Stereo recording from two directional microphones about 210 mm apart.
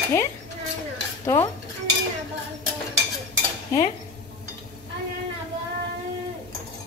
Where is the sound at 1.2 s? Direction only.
15° left (ahead or behind).